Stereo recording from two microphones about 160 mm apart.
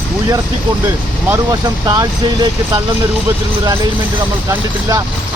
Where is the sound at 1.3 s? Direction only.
20° right (ahead or behind).